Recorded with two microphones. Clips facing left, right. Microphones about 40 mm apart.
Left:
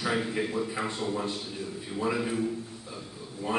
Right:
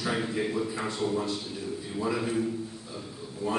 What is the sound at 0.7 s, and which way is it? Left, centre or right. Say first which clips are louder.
Speech: even; centre.